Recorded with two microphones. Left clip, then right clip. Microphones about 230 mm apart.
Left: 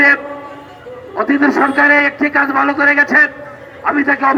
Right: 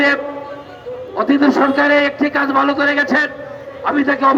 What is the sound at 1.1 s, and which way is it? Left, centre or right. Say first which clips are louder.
A man's voice: left 1 dB; right.